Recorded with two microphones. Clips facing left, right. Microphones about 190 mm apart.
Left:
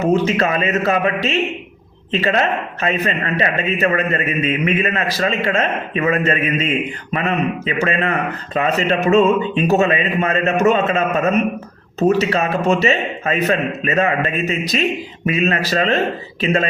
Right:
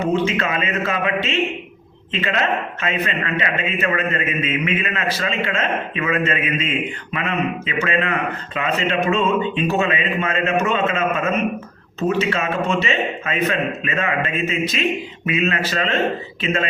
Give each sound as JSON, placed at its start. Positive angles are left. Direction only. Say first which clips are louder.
{"t": 0.0, "sound": "a man's voice", "louder": "left 4 dB", "side_deg": 40}
{"t": 2.8, "sound": "a man's voice", "louder": "left 7 dB", "side_deg": 40}